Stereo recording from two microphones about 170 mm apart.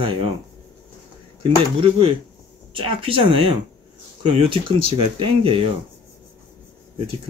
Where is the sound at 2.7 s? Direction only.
30° right (ahead or behind).